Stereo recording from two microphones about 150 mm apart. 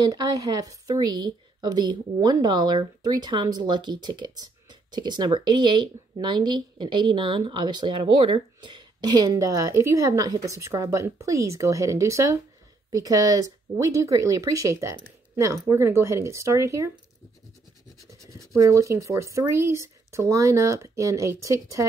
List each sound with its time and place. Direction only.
0.0 s speech: 25° right (ahead or behind)
18.2 s speech: 20° right (ahead or behind)